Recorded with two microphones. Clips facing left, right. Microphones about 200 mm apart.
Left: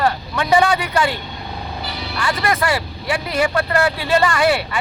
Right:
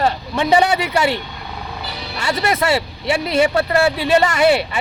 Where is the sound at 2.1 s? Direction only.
25° right (ahead or behind).